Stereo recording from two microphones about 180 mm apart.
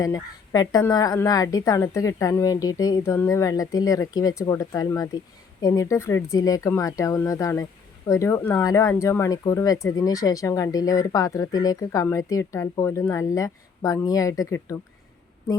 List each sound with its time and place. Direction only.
0.0 s a woman's voice: 20° left (ahead or behind)